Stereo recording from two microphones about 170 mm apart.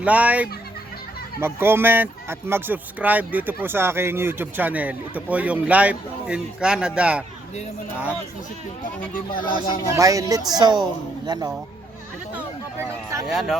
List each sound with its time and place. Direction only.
0.0 s speech: 10° right (ahead or behind)
9.1 s speech: 55° left (ahead or behind)
9.9 s speech: 20° right (ahead or behind)
12.8 s speech: 20° right (ahead or behind)
13.2 s speech: centre (ahead or behind)